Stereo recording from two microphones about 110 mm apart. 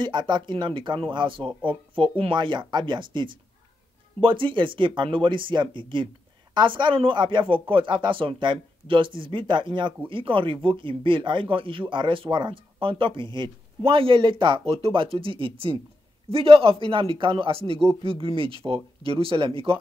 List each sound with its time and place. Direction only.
0.0 s speech: 45° right (ahead or behind)